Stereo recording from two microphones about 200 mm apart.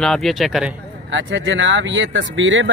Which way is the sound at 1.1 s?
70° right (ahead or behind).